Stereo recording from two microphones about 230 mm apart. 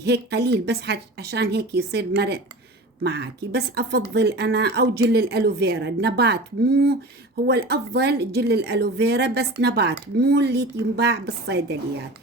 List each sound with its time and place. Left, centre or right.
0.0 s speech: right